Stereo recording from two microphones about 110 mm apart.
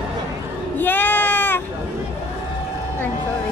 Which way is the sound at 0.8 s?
20° left (ahead or behind).